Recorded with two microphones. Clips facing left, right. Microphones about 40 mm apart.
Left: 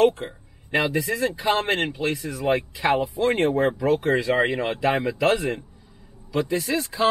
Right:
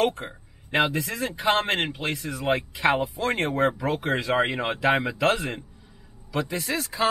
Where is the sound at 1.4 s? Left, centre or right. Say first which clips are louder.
Right 2 dB; right.